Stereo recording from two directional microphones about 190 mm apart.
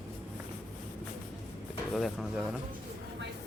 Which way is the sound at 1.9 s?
Centre (ahead or behind).